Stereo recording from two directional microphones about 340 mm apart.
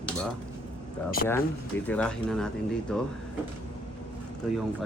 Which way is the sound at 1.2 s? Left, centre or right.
Left.